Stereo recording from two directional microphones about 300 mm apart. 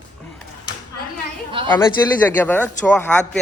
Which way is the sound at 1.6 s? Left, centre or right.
Centre.